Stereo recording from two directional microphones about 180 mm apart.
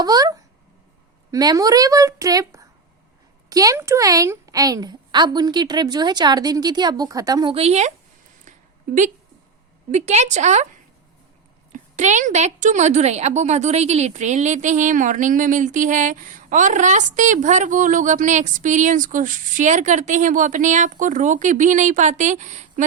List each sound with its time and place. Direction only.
0.0 s speech: 20° right (ahead or behind)
7.5 s speech: 35° right (ahead or behind)
9.9 s speech: 40° right (ahead or behind)
11.7 s a woman's voice: 40° right (ahead or behind)